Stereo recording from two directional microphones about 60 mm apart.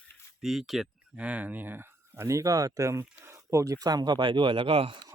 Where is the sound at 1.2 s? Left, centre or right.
Right.